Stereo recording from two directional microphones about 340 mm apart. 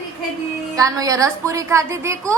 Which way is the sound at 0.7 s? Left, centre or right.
Centre.